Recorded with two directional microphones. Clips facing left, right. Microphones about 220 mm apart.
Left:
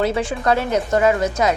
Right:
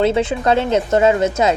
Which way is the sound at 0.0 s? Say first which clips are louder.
Right 4 dB; 25° right (ahead or behind).